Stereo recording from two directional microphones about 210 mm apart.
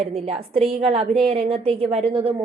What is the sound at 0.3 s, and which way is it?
A woman's voice, 30° right (ahead or behind).